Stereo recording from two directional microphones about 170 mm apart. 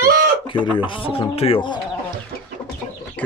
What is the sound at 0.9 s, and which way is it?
Speech, 30° left (ahead or behind).